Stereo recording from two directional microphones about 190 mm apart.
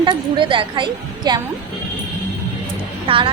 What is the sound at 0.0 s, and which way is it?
A woman's voice, 25° right (ahead or behind).